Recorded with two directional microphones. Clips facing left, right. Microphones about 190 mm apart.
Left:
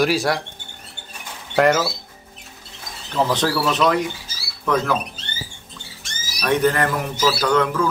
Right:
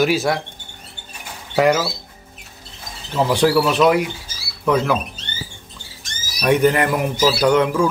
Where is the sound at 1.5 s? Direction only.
Centre (ahead or behind).